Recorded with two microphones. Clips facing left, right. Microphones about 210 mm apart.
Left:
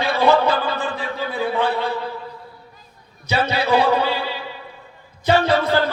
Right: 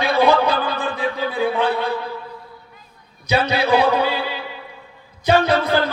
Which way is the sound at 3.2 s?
15° right (ahead or behind).